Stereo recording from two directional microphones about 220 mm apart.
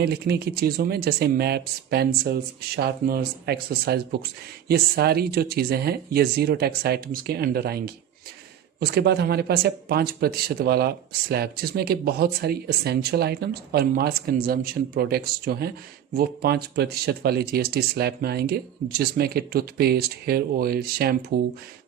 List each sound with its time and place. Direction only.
0.0 s speech: 45° right (ahead or behind)